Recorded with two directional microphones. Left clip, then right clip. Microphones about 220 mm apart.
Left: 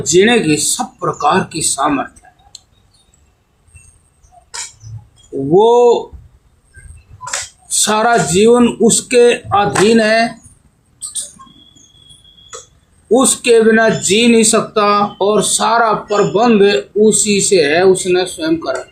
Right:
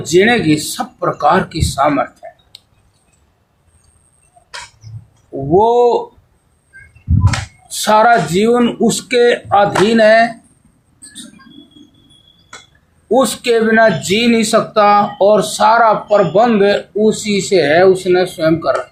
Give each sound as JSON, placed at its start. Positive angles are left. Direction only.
{"t": 0.0, "sound": "speech", "side_deg": -25}
{"t": 5.5, "sound": "speech", "side_deg": -25}
{"t": 7.7, "sound": "speech", "side_deg": -20}
{"t": 13.1, "sound": "speech", "side_deg": -20}